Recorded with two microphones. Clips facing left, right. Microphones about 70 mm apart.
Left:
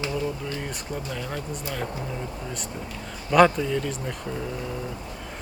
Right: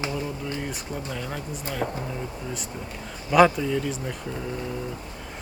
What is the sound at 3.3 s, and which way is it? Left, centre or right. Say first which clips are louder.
Speech: even; centre.